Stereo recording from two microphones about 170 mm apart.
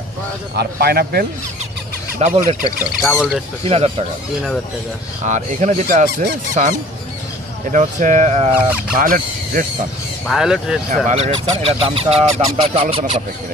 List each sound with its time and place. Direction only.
0.6 s a man's voice: 65° right (ahead or behind)
2.1 s speech: 45° right (ahead or behind)
3.0 s speech: centre (ahead or behind)
3.6 s honk: 35° right (ahead or behind)
5.2 s speech: 45° right (ahead or behind)
7.7 s speech: 50° right (ahead or behind)
8.5 s speech: 10° right (ahead or behind)
8.9 s speech: 55° right (ahead or behind)
10.2 s speech: centre (ahead or behind)
11.1 s honk: 40° right (ahead or behind)